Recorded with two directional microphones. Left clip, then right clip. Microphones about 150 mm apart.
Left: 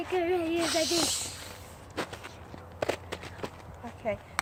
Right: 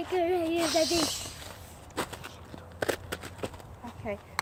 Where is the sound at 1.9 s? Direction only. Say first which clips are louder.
Right 1 dB; 90° right.